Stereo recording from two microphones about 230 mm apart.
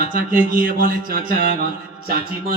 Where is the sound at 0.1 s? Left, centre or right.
Right.